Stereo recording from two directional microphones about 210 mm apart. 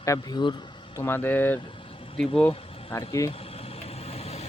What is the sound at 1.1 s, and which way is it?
Speech, 10° left (ahead or behind).